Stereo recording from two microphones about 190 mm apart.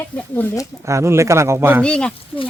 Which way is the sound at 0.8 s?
15° right (ahead or behind).